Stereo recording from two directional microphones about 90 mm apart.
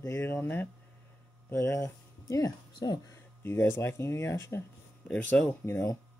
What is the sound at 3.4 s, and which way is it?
Speech, 25° left (ahead or behind).